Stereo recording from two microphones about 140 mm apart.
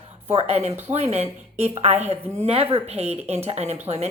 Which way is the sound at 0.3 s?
45° right (ahead or behind).